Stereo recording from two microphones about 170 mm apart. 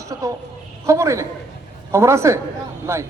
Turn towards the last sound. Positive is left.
turn(degrees=-15)  # may be behind; listen again after turning